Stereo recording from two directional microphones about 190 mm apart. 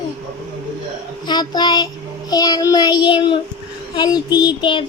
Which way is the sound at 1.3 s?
20° left (ahead or behind).